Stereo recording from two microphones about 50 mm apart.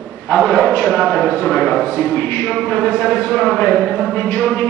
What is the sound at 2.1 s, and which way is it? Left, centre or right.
Speech, left.